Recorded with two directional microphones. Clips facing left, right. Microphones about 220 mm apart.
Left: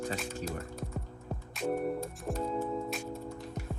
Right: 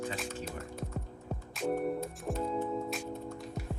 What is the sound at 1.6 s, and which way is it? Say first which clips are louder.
Music: even; centre (ahead or behind).